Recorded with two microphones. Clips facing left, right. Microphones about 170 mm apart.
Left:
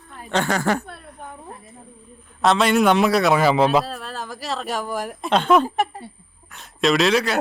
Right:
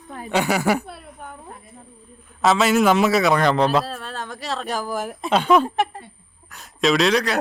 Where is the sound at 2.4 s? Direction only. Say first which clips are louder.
Even; centre (ahead or behind).